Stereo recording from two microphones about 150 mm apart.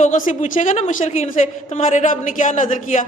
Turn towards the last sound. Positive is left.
turn(degrees=55)  # may be behind; listen again after turning